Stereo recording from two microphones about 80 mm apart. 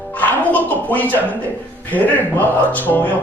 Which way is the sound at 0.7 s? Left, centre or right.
Left.